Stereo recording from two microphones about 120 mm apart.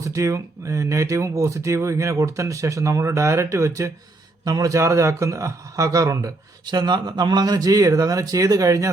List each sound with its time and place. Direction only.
0.0 s speech: 25° right (ahead or behind)